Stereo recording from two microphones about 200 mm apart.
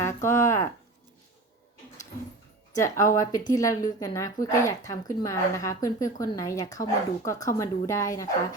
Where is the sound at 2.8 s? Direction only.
15° left (ahead or behind).